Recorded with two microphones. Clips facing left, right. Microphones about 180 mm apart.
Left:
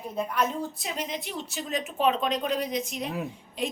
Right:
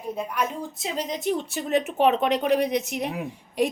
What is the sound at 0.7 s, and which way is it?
Speech, 30° right (ahead or behind).